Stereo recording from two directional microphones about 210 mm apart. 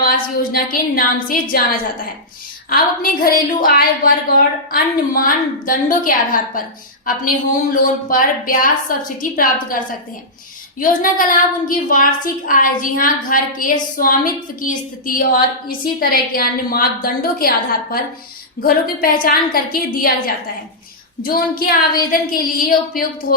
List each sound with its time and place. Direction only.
0.0 s a woman's voice: 45° left (ahead or behind)
10.8 s a woman's voice: 40° left (ahead or behind)